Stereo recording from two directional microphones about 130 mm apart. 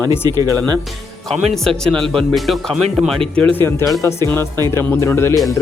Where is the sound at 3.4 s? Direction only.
15° left (ahead or behind).